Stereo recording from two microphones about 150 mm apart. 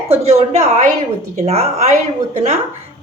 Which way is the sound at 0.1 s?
45° right (ahead or behind).